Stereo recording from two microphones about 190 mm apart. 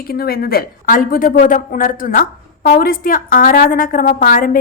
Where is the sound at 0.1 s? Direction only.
50° left (ahead or behind).